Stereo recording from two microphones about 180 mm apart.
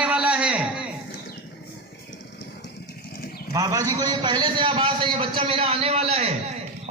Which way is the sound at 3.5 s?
20° right (ahead or behind).